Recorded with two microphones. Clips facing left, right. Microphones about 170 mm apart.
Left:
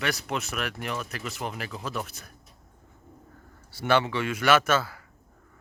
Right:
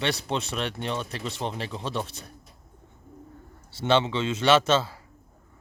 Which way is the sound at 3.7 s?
25° right (ahead or behind).